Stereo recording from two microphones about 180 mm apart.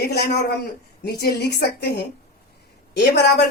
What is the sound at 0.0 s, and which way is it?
Speech, 60° left (ahead or behind).